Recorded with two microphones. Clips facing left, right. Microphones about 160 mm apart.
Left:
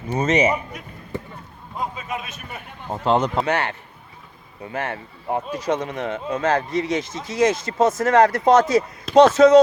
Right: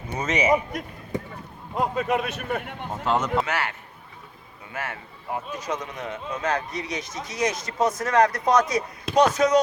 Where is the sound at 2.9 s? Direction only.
30° left (ahead or behind).